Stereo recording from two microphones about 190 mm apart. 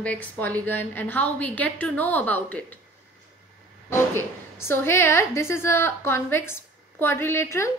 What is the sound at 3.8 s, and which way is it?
A woman's voice, 15° left (ahead or behind).